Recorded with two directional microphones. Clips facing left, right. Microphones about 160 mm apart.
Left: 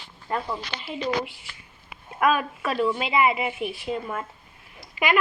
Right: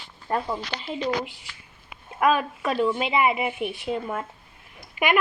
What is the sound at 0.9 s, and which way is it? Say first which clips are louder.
Speech: even; 5° left (ahead or behind).